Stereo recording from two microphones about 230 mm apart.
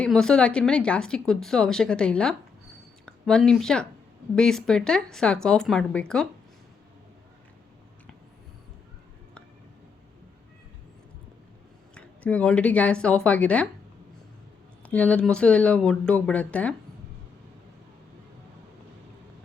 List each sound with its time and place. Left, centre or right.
0.0 s speech: centre
11.9 s speech: centre
14.8 s speech: centre